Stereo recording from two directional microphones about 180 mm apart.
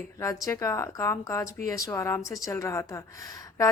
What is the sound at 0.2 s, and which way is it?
A woman's voice, 20° left (ahead or behind).